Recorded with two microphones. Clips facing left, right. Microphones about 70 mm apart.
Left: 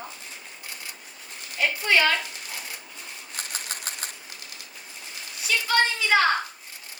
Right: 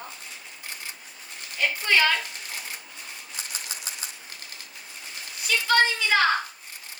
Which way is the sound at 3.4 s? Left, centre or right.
Left.